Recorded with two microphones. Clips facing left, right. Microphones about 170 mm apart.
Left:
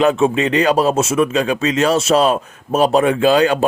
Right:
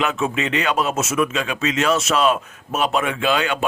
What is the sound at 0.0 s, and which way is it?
Speech, 35° left (ahead or behind).